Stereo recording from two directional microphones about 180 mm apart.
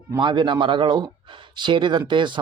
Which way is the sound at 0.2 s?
25° right (ahead or behind).